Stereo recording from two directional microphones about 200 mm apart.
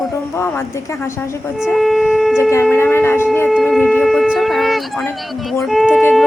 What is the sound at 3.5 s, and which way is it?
Shofar, centre (ahead or behind).